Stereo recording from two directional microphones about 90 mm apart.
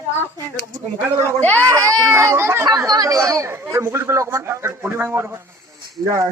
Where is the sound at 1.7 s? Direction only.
40° right (ahead or behind).